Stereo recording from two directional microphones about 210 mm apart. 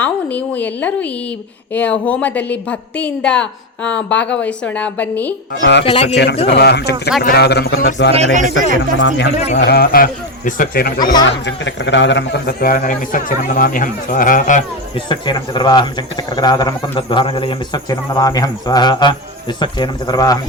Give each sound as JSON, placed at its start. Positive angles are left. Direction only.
{"t": 0.0, "sound": "a woman's voice", "side_deg": 5}
{"t": 5.8, "sound": "speech", "side_deg": 30}
{"t": 6.5, "sound": "speech", "side_deg": 50}
{"t": 8.1, "sound": "a man's voice", "side_deg": -35}
{"t": 9.0, "sound": "speech", "side_deg": 60}
{"t": 9.6, "sound": "speech", "side_deg": 50}
{"t": 11.0, "sound": "speech", "side_deg": 20}
{"t": 11.3, "sound": "a man's voice", "side_deg": 60}
{"t": 14.9, "sound": "speech", "side_deg": 20}